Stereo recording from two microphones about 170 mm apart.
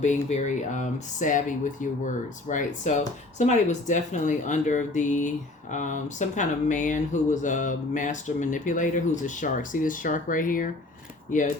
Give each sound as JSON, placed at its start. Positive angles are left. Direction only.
{"t": 0.0, "sound": "speech", "side_deg": 45}